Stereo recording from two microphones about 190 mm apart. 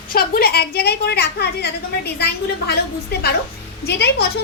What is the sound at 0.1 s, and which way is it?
A woman's voice, 50° left (ahead or behind).